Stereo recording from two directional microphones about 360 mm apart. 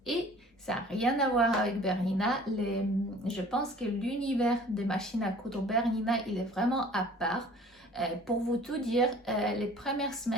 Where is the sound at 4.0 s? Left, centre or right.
Centre.